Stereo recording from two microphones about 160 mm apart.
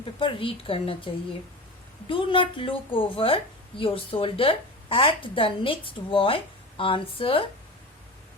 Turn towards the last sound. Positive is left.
turn(degrees=35)  # may be behind; listen again after turning